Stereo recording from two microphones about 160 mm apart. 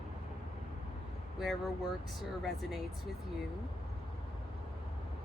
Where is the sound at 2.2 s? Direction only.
Centre (ahead or behind).